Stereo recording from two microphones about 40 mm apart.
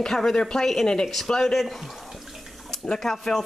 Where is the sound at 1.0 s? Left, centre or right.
Centre.